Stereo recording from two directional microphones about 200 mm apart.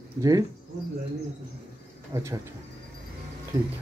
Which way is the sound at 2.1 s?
15° right (ahead or behind).